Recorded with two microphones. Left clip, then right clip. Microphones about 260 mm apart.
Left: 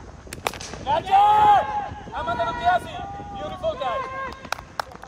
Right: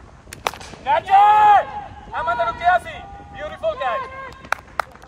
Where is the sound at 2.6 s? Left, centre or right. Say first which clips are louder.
Right 3 dB; right.